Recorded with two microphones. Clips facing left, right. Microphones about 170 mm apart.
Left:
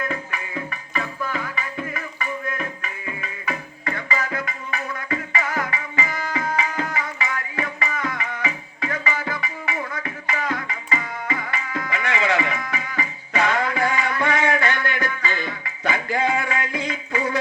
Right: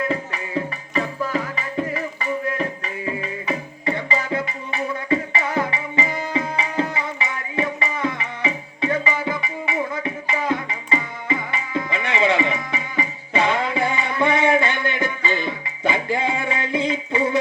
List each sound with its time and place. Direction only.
0.0 s music: 30° right (ahead or behind)